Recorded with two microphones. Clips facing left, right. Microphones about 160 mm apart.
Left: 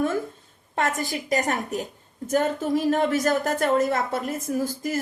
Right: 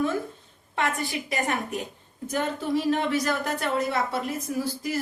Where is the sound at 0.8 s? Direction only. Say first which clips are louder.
Left 2 dB; 45° left (ahead or behind).